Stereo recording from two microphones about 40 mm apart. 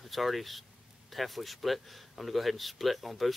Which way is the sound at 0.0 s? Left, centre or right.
Centre.